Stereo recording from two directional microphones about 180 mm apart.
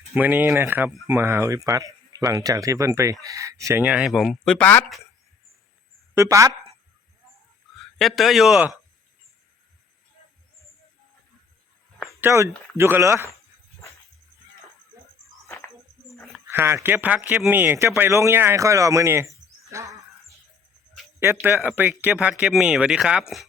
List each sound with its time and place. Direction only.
0.1 s speech: 10° right (ahead or behind); by 4.9 s 10° left (ahead or behind)
6.1 s speech: 15° right (ahead or behind)
7.9 s speech: centre (ahead or behind)
12.2 s speech: 15° right (ahead or behind)
16.5 s speech: 15° right (ahead or behind)
21.2 s speech: 10° right (ahead or behind)